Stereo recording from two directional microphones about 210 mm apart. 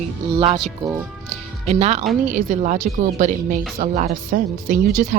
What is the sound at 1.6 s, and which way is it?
Speech, 30° right (ahead or behind).